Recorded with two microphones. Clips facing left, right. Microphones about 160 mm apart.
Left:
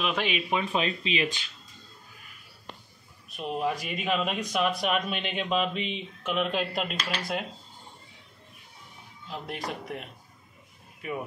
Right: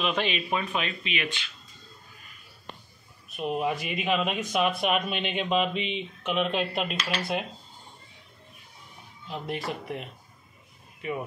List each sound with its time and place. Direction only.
0.0 s speech: 5° left (ahead or behind)
0.7 s speech: 30° left (ahead or behind)
3.3 s speech: 5° right (ahead or behind)
9.3 s speech: centre (ahead or behind)